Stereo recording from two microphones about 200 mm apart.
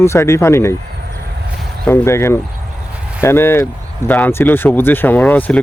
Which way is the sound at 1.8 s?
10° left (ahead or behind).